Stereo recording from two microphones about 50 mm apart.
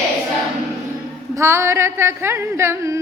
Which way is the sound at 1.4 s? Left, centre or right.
Right.